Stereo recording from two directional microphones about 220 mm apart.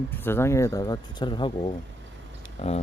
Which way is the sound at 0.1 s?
10° left (ahead or behind).